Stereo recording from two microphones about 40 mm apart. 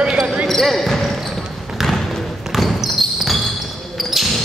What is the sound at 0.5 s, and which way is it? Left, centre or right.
Basketball bounce, centre.